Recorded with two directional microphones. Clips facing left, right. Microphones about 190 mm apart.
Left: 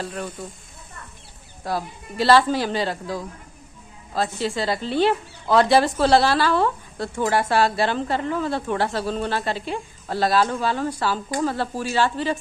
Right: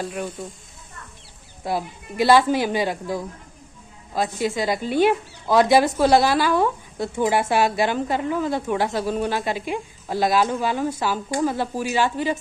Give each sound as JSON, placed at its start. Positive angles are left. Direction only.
{"t": 0.0, "sound": "speech", "side_deg": -10}
{"t": 1.6, "sound": "speech", "side_deg": -15}